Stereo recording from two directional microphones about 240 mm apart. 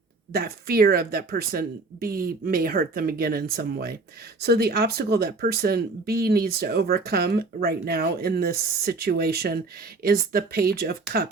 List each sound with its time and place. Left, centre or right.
0.3 s speech: right